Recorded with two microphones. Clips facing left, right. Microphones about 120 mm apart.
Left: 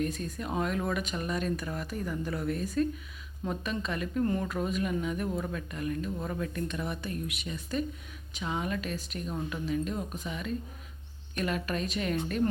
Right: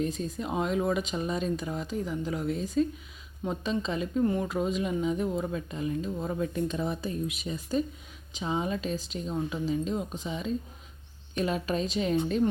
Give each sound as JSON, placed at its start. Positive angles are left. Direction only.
{"t": 0.0, "sound": "speech", "side_deg": -25}
{"t": 3.4, "sound": "speech", "side_deg": -25}
{"t": 4.2, "sound": "speech", "side_deg": -10}
{"t": 4.5, "sound": "speech", "side_deg": -20}